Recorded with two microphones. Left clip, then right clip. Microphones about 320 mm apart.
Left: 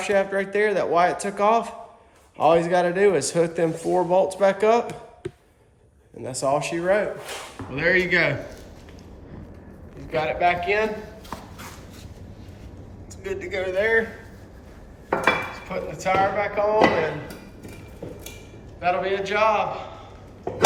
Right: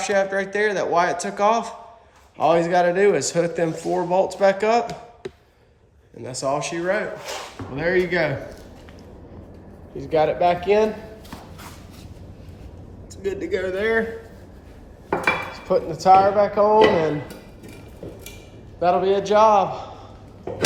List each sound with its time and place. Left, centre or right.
0.0 s speech: centre
6.2 s speech: centre
10.2 s a man's voice: centre
13.5 s speech: right
15.1 s dishes: centre
18.8 s a man's voice: centre